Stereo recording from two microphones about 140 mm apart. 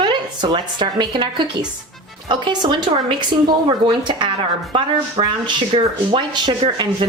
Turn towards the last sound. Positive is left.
turn(degrees=-35)  # may be behind; listen again after turning